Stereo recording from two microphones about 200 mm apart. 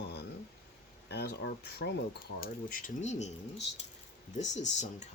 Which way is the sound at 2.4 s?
45° left (ahead or behind).